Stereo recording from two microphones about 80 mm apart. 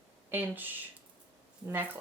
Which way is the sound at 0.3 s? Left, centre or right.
Right.